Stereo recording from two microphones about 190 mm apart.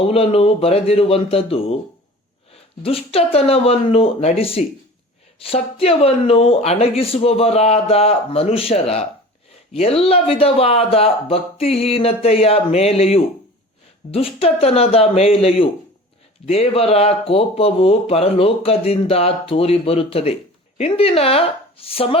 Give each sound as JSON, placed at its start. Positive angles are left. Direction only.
{"t": 0.0, "sound": "speech", "side_deg": 30}